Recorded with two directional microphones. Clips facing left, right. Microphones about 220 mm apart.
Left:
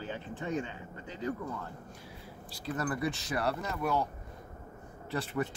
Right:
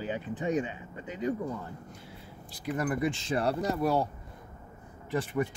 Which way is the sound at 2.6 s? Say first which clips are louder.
Right 4 dB; 15° right (ahead or behind).